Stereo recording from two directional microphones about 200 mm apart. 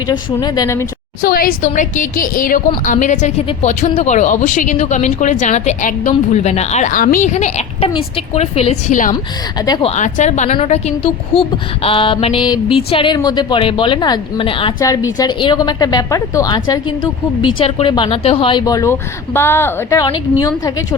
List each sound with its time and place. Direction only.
0.1 s a woman's voice: 20° left (ahead or behind)
1.2 s a woman's voice: 45° left (ahead or behind)
9.6 s a woman's voice: 20° left (ahead or behind)
9.9 s a woman's voice: 35° left (ahead or behind); by 20.1 s 15° left (ahead or behind)